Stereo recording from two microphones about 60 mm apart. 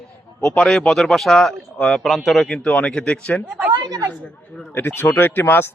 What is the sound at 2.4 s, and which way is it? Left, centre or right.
Speech, centre.